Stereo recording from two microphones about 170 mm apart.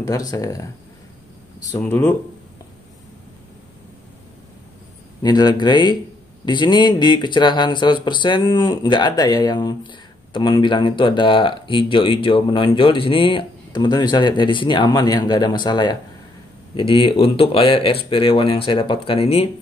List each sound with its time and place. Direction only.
0.0 s speech: 20° left (ahead or behind)
1.8 s speech: 10° left (ahead or behind)
5.2 s speech: 25° left (ahead or behind)